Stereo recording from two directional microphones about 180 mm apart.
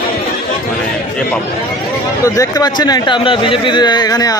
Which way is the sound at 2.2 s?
20° left (ahead or behind).